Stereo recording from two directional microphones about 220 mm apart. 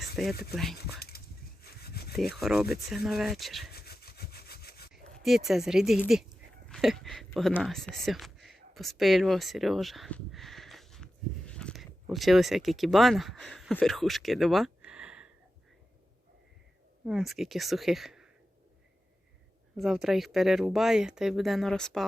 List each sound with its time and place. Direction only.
0.2 s speech: centre (ahead or behind)
0.9 s a sound: 45° left (ahead or behind)
1.6 s sawing: 45° left (ahead or behind)
2.3 s speech: centre (ahead or behind)
3.7 s sawing: 45° left (ahead or behind)
4.9 s a sound: centre (ahead or behind)
5.5 s speech: centre (ahead or behind)
17.1 s speech: centre (ahead or behind)
19.7 s speech: centre (ahead or behind)